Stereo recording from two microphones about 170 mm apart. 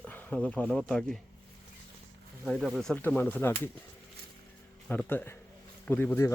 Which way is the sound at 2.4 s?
Centre (ahead or behind).